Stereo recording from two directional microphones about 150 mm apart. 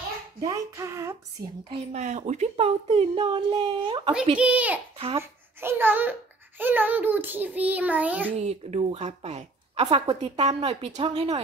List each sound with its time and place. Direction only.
0.4 s child singing: 20° right (ahead or behind)
1.9 s speech: 50° right (ahead or behind); by 4.1 s 30° right (ahead or behind)
4.4 s child singing: 10° right (ahead or behind)
4.9 s a child's voice: 40° right (ahead or behind)
5.2 s a child's voice: 15° right (ahead or behind)
6.6 s child singing: 10° right (ahead or behind)
8.4 s speech: 45° right (ahead or behind)